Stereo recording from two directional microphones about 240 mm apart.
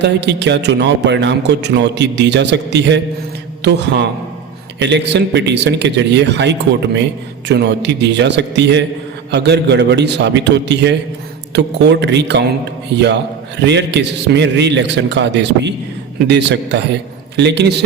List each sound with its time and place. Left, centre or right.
0.0 s a man's voice: right
13.6 s a man's voice: right